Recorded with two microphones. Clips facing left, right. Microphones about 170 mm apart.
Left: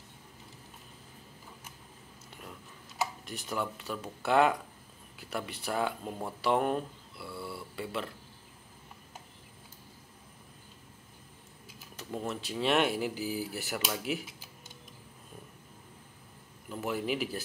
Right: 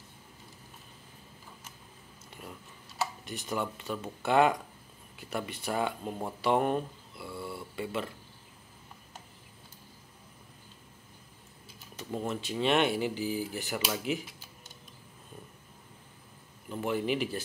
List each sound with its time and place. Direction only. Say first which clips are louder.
3.3 s speech: right 1 dB; centre (ahead or behind)
6.4 s a sound: right 1 dB; centre (ahead or behind)
12.0 s speech: right 2 dB; centre (ahead or behind)
16.6 s speech: right 2 dB; 5° left (ahead or behind)